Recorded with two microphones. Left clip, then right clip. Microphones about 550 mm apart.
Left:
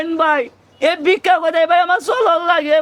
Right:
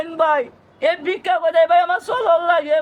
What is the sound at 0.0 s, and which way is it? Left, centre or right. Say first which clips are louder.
A man's voice: left 2 dB; left.